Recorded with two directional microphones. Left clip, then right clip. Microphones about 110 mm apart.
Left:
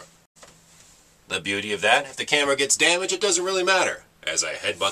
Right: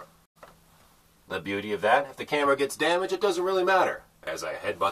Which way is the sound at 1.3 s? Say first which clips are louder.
Left 4 dB; 30° left (ahead or behind).